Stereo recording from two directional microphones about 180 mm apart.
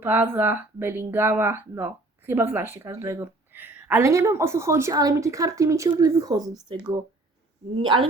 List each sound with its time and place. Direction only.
0.0 s speech: 10° right (ahead or behind); by 8.0 s 25° right (ahead or behind)